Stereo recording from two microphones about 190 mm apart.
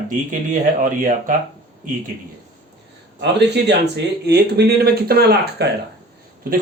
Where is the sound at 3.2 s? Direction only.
65° right (ahead or behind).